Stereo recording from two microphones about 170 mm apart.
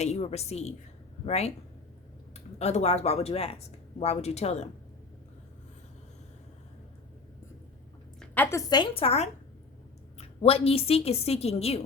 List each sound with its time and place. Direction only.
0.0 s a woman's voice: 40° left (ahead or behind)
8.2 s a woman's voice: 15° left (ahead or behind); by 11.8 s 35° left (ahead or behind)